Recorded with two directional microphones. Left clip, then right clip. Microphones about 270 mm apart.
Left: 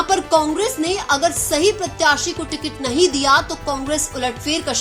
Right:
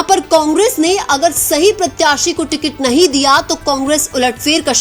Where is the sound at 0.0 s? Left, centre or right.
Right.